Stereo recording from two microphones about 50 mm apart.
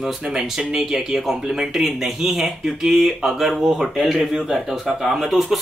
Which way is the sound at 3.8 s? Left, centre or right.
Centre.